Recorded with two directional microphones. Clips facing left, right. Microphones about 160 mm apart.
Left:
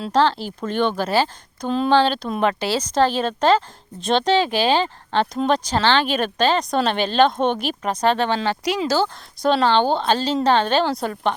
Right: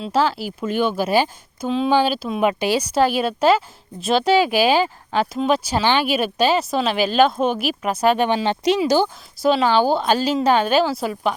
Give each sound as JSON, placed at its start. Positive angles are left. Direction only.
{"t": 0.0, "sound": "speech", "side_deg": -10}
{"t": 9.4, "sound": "speech", "side_deg": -5}